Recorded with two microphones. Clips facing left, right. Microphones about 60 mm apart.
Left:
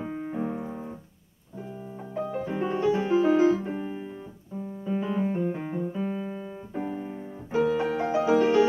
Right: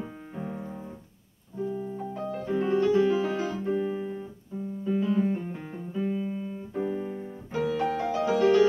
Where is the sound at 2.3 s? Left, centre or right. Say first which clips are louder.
Right 3 dB; centre.